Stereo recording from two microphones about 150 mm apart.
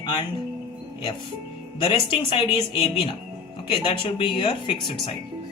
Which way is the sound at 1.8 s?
35° left (ahead or behind).